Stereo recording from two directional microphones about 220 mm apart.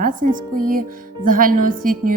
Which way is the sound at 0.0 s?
40° right (ahead or behind).